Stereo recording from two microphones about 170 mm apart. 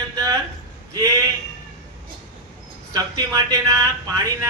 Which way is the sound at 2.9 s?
20° right (ahead or behind).